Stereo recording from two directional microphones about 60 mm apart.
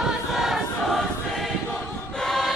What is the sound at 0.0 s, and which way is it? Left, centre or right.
Choir, centre.